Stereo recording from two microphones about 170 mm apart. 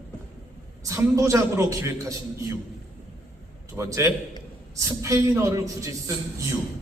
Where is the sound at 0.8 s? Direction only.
20° right (ahead or behind).